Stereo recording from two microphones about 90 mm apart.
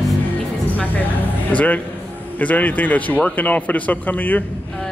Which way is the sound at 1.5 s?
15° left (ahead or behind).